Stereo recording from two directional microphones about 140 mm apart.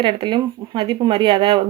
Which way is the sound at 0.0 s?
35° right (ahead or behind).